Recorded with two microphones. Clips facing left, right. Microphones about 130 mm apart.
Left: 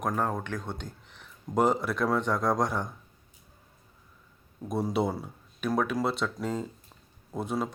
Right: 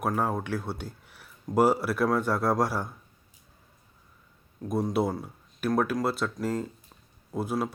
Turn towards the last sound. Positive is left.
turn(degrees=0)  # may be behind; listen again after turning